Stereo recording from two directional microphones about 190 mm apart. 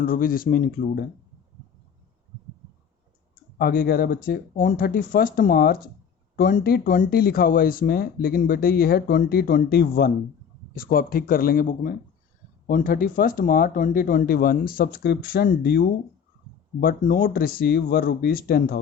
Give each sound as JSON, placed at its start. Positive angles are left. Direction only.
{"t": 0.0, "sound": "speech", "side_deg": 50}
{"t": 3.6, "sound": "speech", "side_deg": 55}
{"t": 16.8, "sound": "speech", "side_deg": 50}